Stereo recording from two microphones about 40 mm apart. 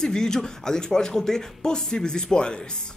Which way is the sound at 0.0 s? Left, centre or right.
Centre.